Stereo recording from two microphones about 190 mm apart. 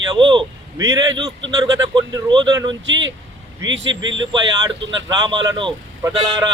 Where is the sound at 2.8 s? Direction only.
80° right.